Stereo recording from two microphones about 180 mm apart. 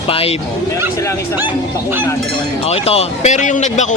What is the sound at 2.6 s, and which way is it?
Speech, 35° left (ahead or behind).